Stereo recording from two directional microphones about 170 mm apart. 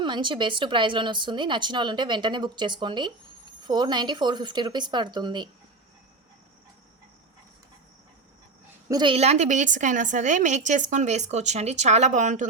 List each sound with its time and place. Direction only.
0.0 s speech: 25° right (ahead or behind)
8.9 s a woman's voice: 25° right (ahead or behind); by 12.5 s 45° right (ahead or behind)